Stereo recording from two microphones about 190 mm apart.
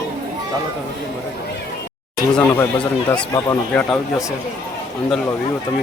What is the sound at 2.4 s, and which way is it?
Speech, 10° left (ahead or behind).